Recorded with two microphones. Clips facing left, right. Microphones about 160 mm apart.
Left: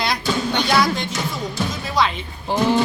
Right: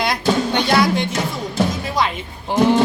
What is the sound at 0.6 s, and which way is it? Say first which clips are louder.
Music: right 3 dB; 55° right (ahead or behind).